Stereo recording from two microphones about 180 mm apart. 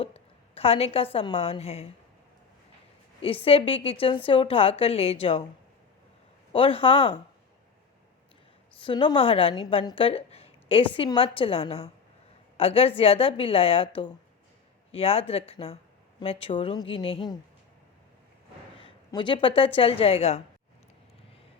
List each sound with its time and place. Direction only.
0.0 s a woman's voice: 35° left (ahead or behind)
3.2 s a woman's voice: 30° left (ahead or behind)
6.5 s speech: 30° left (ahead or behind)
8.8 s a woman's voice: 25° left (ahead or behind)
18.8 s a woman's voice: 25° left (ahead or behind)